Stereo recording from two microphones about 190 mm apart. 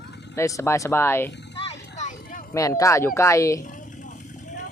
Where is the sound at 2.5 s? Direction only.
15° left (ahead or behind).